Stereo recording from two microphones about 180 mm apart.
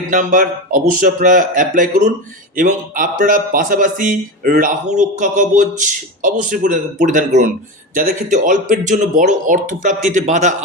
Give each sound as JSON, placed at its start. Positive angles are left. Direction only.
{"t": 0.1, "sound": "speech", "side_deg": -45}